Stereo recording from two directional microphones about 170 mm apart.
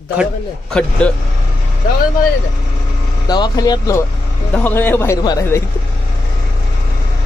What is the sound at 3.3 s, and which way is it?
Speech, 25° left (ahead or behind).